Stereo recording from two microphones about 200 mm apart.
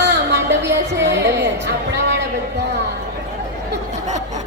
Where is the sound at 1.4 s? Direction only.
60° right (ahead or behind).